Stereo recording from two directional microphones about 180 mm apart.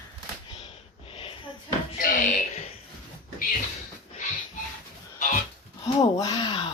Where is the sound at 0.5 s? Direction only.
30° left (ahead or behind).